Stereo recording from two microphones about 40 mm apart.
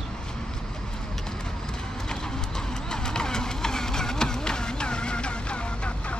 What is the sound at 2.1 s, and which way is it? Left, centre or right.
Vehicle, centre.